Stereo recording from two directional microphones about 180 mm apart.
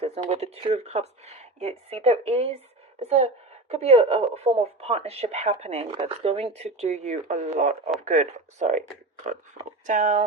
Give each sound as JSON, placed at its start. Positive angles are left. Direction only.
{"t": 0.0, "sound": "a woman's voice", "side_deg": -35}
{"t": 9.8, "sound": "speech", "side_deg": -45}